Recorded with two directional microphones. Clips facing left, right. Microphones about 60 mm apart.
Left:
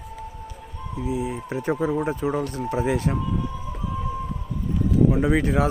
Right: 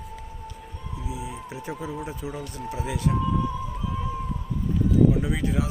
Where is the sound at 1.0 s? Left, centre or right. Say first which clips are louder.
Left 8 dB; left.